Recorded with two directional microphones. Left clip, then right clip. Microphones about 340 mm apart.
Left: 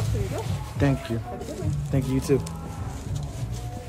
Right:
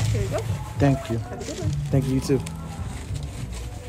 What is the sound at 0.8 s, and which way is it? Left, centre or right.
Speech, centre.